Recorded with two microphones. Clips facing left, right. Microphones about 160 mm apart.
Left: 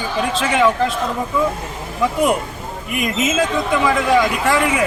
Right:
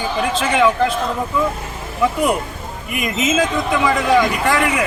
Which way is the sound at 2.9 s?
Centre (ahead or behind).